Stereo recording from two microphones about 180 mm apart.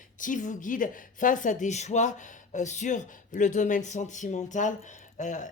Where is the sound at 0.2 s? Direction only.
45° left (ahead or behind).